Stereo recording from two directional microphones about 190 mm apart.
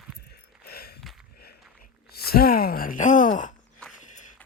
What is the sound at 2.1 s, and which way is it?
Speech, 55° left (ahead or behind).